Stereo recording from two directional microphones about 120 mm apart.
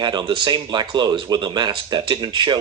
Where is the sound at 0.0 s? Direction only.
40° right (ahead or behind).